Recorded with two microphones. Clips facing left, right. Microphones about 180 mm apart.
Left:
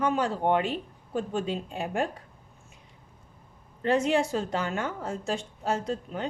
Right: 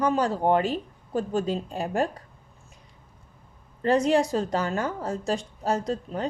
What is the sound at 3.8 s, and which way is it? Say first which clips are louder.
A woman's voice: right 3 dB; 40° right (ahead or behind).